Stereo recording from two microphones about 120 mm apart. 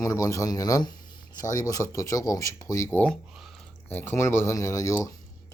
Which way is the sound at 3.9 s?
15° left (ahead or behind).